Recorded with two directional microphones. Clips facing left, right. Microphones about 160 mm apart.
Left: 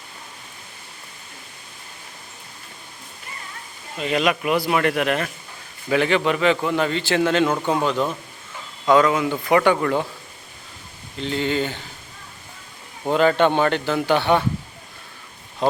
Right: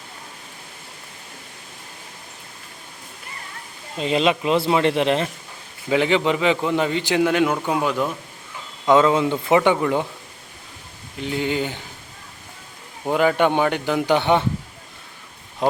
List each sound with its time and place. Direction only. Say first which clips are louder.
3.9 s a man's voice: right 2 dB; 25° right (ahead or behind); by 8.1 s 5° right (ahead or behind)
8.9 s a man's voice: right 1 dB; 25° right (ahead or behind)
11.2 s a man's voice: left 1 dB; 10° right (ahead or behind)
13.1 s a man's voice: left 1 dB; 10° right (ahead or behind)